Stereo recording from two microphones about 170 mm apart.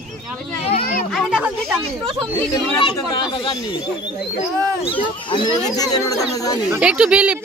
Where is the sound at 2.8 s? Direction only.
30° left (ahead or behind).